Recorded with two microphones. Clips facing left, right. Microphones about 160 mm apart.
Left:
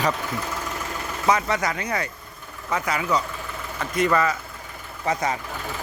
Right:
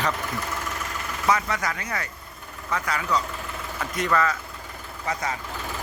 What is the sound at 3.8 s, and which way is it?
Speech, centre (ahead or behind).